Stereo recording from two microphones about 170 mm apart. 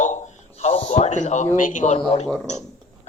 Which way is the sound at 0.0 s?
45° left (ahead or behind).